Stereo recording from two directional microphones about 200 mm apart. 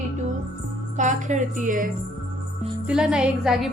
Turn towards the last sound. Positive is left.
turn(degrees=-5)  # may be behind; listen again after turning